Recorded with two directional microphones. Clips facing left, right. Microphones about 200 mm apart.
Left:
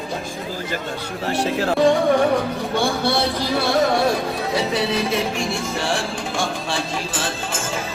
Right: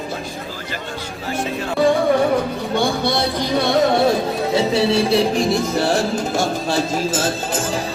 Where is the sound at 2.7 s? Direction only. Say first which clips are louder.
Right 2 dB; 15° right (ahead or behind).